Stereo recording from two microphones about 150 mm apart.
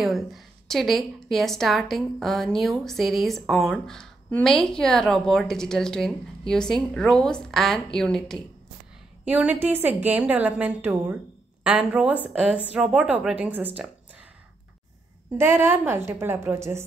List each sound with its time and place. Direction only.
0.0 s a woman's voice: centre (ahead or behind)
9.2 s a woman's voice: 10° right (ahead or behind)
15.3 s a woman's voice: 15° right (ahead or behind)